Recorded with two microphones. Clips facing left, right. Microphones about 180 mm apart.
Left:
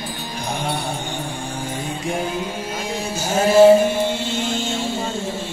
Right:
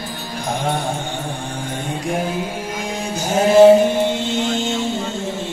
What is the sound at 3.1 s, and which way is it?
Music, 15° right (ahead or behind).